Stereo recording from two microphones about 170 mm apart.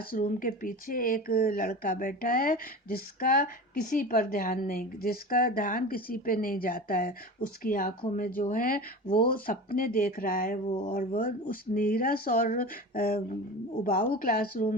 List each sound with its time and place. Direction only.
0.1 s a woman's voice: 50° left (ahead or behind)